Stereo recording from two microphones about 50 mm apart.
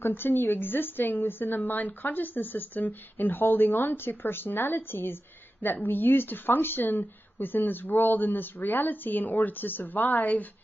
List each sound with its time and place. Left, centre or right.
0.0 s a woman's voice: left